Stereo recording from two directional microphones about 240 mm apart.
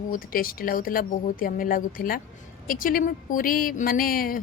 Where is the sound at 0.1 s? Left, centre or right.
Left.